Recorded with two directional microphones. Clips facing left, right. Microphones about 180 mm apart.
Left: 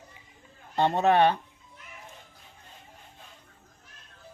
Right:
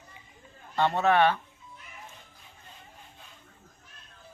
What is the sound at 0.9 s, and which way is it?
Speech, 35° left (ahead or behind).